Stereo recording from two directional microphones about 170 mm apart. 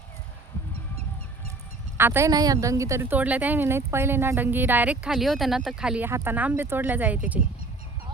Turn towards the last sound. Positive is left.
turn(degrees=-10)  # may be behind; listen again after turning